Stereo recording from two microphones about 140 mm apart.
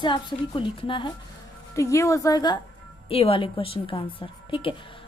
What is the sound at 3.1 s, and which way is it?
A woman's voice, 40° left (ahead or behind).